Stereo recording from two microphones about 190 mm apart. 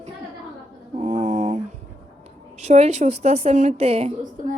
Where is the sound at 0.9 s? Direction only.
35° right (ahead or behind).